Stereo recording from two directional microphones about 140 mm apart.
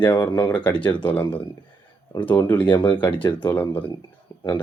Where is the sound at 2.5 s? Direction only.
15° left (ahead or behind).